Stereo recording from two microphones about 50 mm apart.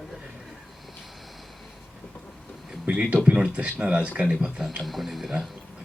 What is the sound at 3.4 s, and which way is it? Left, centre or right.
Speech, right.